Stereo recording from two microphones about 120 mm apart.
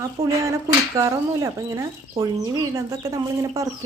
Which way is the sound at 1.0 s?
30° right (ahead or behind).